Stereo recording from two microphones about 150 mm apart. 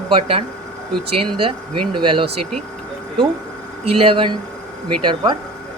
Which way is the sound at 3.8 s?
40° right (ahead or behind).